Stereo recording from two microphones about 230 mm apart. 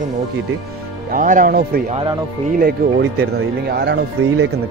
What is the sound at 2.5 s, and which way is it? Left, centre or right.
Speech, right.